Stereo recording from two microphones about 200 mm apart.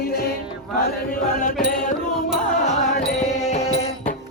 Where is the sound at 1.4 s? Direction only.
45° left (ahead or behind).